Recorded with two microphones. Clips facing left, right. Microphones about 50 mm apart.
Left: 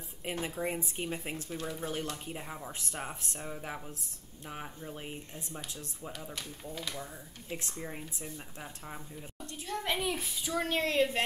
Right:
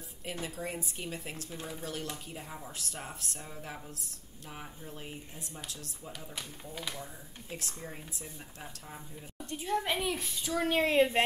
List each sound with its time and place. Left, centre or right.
0.2 s speech: left
4.5 s speech: centre
6.3 s speech: centre
7.5 s speech: centre
9.5 s speech: centre
9.8 s speech: centre
10.7 s speech: centre